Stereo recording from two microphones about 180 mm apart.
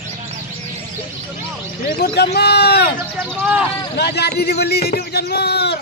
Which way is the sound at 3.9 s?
65° left (ahead or behind).